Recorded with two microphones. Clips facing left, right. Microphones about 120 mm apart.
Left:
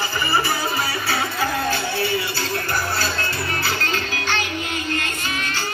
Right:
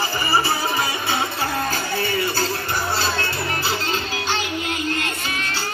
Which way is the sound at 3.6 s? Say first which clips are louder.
Even; 25° right (ahead or behind).